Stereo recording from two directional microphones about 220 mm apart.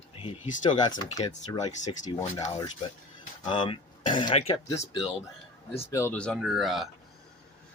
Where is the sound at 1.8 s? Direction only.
35° left (ahead or behind).